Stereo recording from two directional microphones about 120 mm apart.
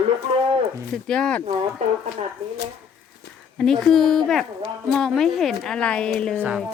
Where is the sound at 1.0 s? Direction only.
5° left (ahead or behind).